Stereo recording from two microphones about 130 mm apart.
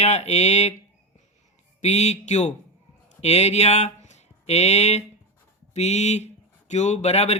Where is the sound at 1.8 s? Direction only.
60° left (ahead or behind).